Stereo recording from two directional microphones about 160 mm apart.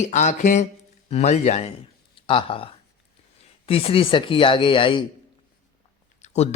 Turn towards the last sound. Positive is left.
turn(degrees=45)  # may be behind; listen again after turning